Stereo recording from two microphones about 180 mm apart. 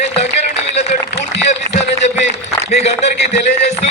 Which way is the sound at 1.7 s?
35° right (ahead or behind).